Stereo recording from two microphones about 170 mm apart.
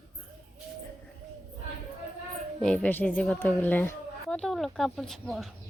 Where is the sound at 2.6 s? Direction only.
5° left (ahead or behind).